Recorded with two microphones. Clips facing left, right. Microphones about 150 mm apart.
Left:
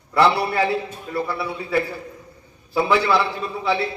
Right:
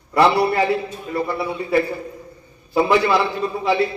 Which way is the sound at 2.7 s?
15° right (ahead or behind).